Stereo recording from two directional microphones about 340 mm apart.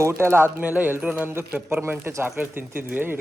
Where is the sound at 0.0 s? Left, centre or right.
Centre.